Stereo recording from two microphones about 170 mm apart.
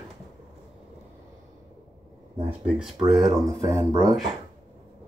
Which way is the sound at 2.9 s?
25° right (ahead or behind).